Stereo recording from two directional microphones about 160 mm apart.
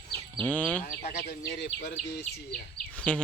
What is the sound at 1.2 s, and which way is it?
Speech, 90° left.